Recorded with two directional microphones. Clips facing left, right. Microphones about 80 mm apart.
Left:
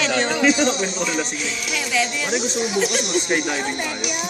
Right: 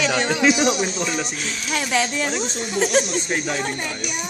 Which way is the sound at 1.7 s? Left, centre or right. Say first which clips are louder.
Right 2 dB; right.